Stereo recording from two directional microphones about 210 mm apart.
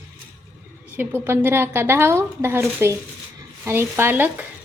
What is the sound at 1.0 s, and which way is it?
A woman's voice, 10° right (ahead or behind).